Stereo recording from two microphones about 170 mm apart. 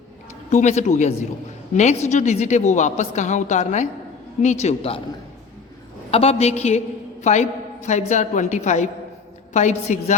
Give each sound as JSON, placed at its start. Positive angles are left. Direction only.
{"t": 0.5, "sound": "a woman's voice", "side_deg": 45}
{"t": 6.1, "sound": "a woman's voice", "side_deg": 35}